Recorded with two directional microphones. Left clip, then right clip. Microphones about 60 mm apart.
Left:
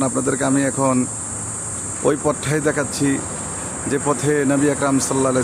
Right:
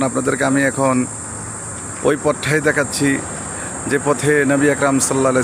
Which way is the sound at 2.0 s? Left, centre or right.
Centre.